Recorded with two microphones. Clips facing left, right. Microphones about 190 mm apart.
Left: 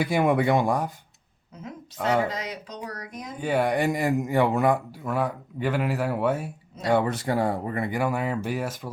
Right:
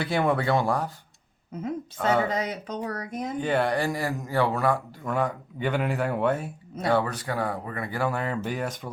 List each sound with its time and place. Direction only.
0.0 s speech: 10° left (ahead or behind)
2.0 s speech: 10° left (ahead or behind)
2.3 s speech: 55° right (ahead or behind)
3.3 s speech: 10° left (ahead or behind)
4.9 s speech: 5° left (ahead or behind)
6.8 s speech: 20° left (ahead or behind)